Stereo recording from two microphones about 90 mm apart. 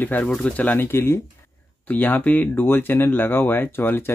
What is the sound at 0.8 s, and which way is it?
Speech, 25° left (ahead or behind).